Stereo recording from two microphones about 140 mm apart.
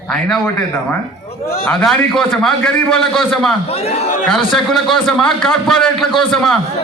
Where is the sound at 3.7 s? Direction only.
45° left (ahead or behind).